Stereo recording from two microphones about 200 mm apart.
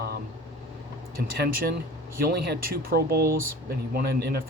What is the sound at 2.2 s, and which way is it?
Speech, 55° right (ahead or behind).